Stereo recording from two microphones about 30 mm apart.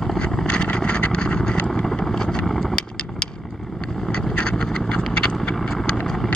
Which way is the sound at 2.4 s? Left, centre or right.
Centre.